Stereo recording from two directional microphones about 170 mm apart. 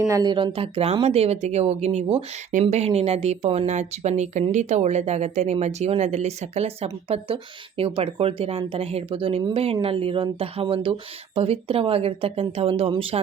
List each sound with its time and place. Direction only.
0.1 s speech: 25° right (ahead or behind)